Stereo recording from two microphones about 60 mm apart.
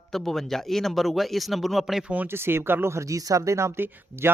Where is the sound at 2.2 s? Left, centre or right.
Right.